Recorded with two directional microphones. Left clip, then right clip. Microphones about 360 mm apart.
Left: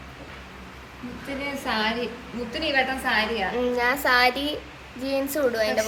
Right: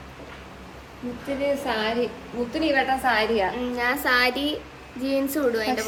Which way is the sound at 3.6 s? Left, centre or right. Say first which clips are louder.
Left 2 dB; centre.